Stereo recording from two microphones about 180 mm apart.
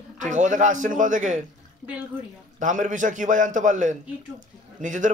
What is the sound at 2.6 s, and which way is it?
A man's voice, 45° right (ahead or behind).